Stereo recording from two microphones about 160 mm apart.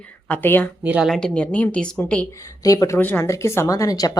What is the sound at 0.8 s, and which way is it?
Speech, 5° right (ahead or behind).